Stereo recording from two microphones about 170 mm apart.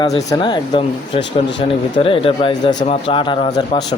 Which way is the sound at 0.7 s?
35° left (ahead or behind).